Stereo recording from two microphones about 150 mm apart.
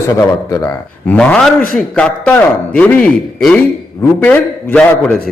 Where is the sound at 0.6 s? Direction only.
10° left (ahead or behind).